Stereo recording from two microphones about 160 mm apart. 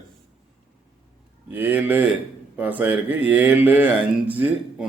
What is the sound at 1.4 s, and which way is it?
A man's voice, 10° right (ahead or behind).